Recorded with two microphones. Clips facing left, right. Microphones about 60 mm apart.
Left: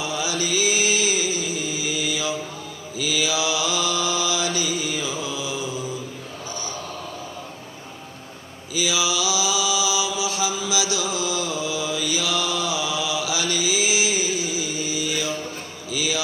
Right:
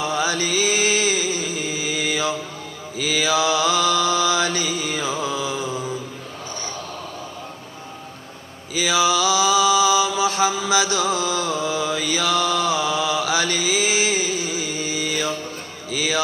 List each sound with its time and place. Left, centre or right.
0.0 s music: right
2.9 s mantra: right
8.7 s mantra: right
15.9 s music: right